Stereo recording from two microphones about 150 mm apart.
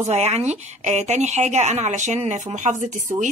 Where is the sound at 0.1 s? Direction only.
45° right (ahead or behind).